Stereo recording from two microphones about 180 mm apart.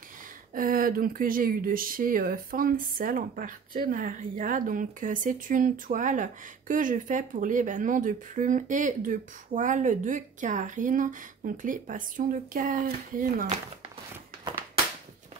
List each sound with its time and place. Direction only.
0.6 s speech: 50° right (ahead or behind)